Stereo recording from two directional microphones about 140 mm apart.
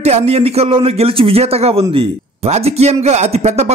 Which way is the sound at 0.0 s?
50° right (ahead or behind).